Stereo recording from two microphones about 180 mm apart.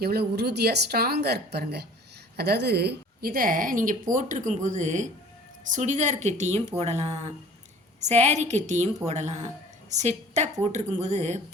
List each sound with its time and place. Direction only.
0.0 s a woman's voice: 60° right (ahead or behind); by 11.3 s 40° right (ahead or behind)